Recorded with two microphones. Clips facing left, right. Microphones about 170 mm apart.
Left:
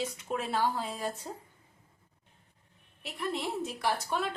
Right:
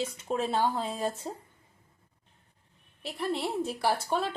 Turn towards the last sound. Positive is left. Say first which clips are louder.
# right 3 dB
turn(degrees=-30)  # may be behind; listen again after turning